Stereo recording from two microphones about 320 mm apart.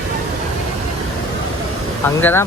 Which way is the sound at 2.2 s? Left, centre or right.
Centre.